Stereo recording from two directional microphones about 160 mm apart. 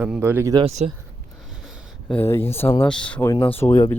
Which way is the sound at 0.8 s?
40° right (ahead or behind).